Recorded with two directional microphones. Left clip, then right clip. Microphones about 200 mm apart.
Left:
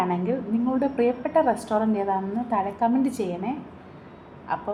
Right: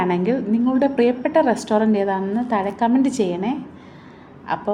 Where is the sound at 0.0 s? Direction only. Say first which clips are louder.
Right 5 dB; 40° right (ahead or behind).